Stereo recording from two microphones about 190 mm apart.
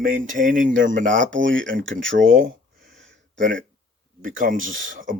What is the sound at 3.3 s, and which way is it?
Speech, 80° right.